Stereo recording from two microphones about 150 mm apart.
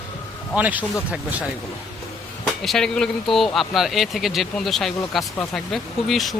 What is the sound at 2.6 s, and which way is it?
Speech, centre (ahead or behind).